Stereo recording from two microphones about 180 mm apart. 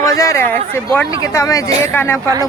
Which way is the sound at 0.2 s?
15° left (ahead or behind).